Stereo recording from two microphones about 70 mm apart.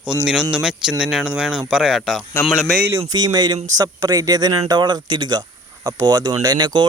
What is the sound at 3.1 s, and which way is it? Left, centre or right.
Speech, right.